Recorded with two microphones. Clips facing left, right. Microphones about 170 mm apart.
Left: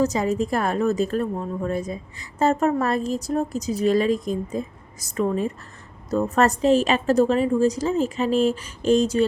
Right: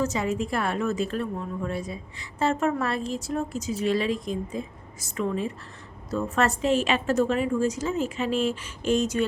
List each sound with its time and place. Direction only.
0.0 s a woman's voice: 40° left (ahead or behind)